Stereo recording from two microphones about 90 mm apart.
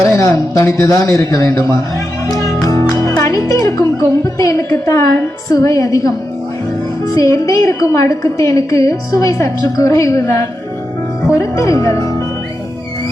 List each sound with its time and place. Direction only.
0.2 s a woman's voice: 40° left (ahead or behind)
2.3 s music: 40° left (ahead or behind)
3.2 s speech: 40° left (ahead or behind)
4.4 s a sound: 40° left (ahead or behind)
5.5 s a woman's voice: 40° left (ahead or behind)